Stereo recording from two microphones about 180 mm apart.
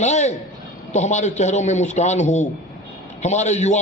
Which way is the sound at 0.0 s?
40° left (ahead or behind).